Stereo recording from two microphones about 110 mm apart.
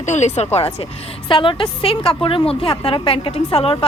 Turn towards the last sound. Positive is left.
turn(degrees=60)  # may be behind; listen again after turning